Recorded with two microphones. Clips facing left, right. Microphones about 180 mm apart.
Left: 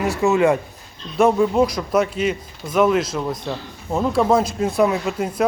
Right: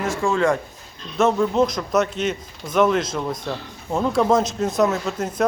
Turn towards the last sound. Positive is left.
turn(degrees=10)  # may be behind; listen again after turning